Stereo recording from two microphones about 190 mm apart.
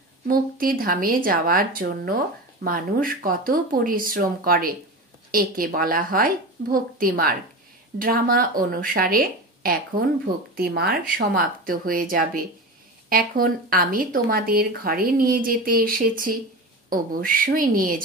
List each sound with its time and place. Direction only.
0.3 s speech: 50° right (ahead or behind)